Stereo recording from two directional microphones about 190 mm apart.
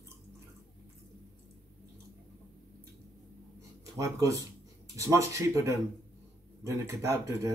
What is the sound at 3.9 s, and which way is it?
Speech, 15° right (ahead or behind).